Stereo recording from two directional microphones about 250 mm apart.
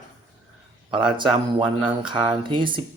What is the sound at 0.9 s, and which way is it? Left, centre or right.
Speech, centre.